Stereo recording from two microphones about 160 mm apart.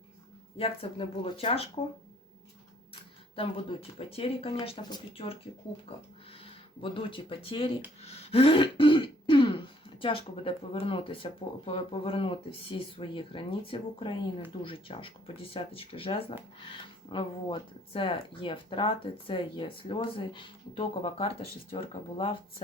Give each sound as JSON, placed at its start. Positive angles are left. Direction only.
{"t": 0.5, "sound": "speech", "side_deg": 35}
{"t": 2.9, "sound": "speech", "side_deg": 35}
{"t": 8.0, "sound": "throat clearing", "side_deg": 40}
{"t": 10.0, "sound": "speech", "side_deg": 35}